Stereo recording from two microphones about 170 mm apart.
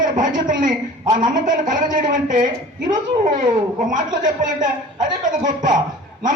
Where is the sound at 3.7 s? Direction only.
50° right (ahead or behind).